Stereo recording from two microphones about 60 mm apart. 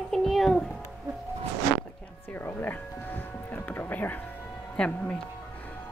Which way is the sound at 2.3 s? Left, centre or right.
Left.